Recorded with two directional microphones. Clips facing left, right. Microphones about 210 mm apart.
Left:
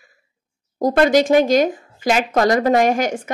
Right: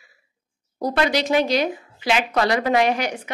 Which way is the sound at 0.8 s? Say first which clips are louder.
Left 7 dB; 50° left (ahead or behind).